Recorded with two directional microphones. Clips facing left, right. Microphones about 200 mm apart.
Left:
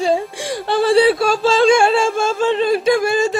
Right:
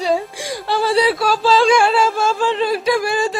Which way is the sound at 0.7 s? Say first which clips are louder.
Left 4 dB; 55° left (ahead or behind).